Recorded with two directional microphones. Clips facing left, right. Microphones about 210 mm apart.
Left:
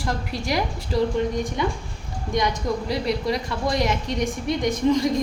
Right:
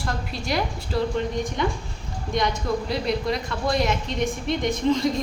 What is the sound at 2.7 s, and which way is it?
A woman's voice, 15° left (ahead or behind).